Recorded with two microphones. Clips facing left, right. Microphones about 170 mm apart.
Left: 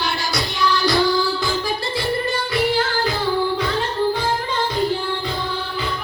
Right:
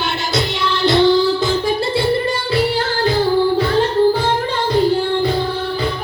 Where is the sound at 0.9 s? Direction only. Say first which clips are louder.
Right 8 dB; 25° right (ahead or behind).